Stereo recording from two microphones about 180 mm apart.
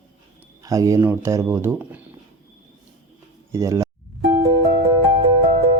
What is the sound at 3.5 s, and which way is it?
Speech, 15° right (ahead or behind).